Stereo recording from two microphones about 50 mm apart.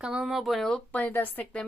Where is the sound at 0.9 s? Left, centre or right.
Left.